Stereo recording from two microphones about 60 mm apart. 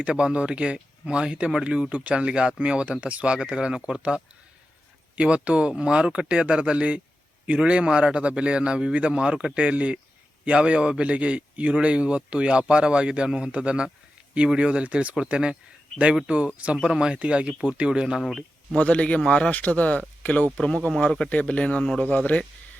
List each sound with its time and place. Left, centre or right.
0.0 s a man's voice: centre
18.2 s speech: centre
18.8 s speech: left
19.5 s speech: left
20.6 s speech: centre
21.2 s speech: left